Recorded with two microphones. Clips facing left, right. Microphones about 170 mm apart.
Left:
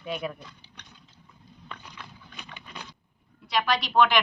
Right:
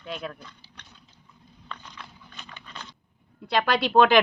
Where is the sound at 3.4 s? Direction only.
55° right (ahead or behind).